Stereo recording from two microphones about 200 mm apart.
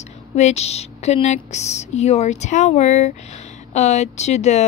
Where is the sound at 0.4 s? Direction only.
35° left (ahead or behind).